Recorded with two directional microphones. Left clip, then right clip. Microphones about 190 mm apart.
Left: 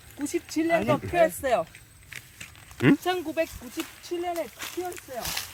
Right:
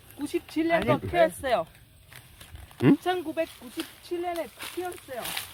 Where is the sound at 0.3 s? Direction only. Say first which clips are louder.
Left 1 dB; 30° left (ahead or behind).